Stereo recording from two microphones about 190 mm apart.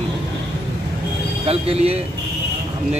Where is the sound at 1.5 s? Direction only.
30° right (ahead or behind).